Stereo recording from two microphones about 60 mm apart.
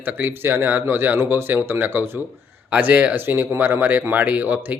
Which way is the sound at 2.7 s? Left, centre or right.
Right.